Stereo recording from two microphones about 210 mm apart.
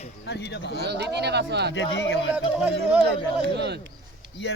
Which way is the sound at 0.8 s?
55° right (ahead or behind).